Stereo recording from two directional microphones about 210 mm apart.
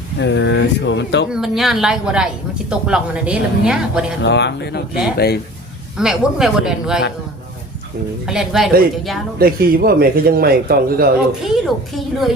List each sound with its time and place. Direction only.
0.2 s speech: 60° left (ahead or behind)
1.3 s speech: centre (ahead or behind)
4.2 s a man's voice: 55° left (ahead or behind)
6.0 s speech: 5° right (ahead or behind)
8.3 s speech: centre (ahead or behind)
9.4 s a man's voice: 45° right (ahead or behind)
11.4 s speech: centre (ahead or behind)